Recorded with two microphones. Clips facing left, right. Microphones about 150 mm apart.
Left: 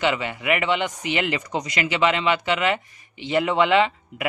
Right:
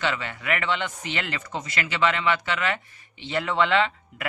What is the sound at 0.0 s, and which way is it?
Speech, 15° left (ahead or behind).